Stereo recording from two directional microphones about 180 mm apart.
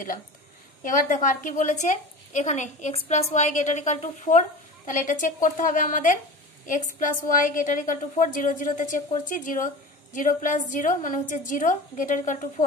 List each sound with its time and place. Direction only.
0.8 s a woman's voice: 45° left (ahead or behind)